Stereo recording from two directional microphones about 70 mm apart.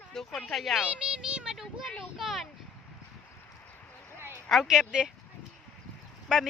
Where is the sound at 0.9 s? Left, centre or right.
Centre.